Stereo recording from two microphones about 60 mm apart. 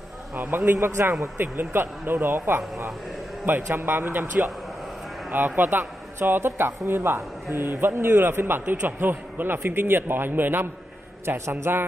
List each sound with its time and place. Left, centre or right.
0.4 s a man's voice: right
7.5 s a man's voice: right
11.2 s a man's voice: right